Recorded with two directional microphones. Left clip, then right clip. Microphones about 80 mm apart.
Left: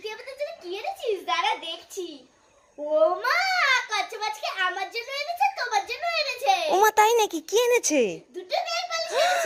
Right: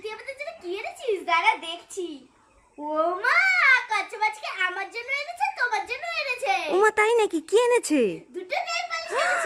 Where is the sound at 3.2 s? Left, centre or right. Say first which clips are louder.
Right 3 dB; right.